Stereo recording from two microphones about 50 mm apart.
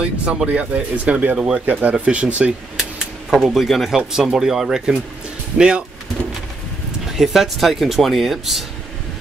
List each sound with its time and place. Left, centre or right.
0.0 s speech: right
1.3 s speech: centre
1.7 s speech: right
2.8 s a sound: centre
4.1 s speech: centre
7.1 s speech: centre